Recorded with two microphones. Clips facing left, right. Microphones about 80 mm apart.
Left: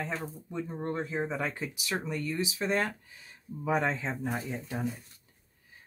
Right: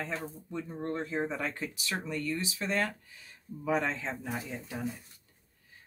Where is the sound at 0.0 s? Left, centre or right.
Centre.